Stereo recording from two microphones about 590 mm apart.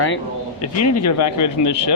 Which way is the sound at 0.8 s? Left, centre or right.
Left.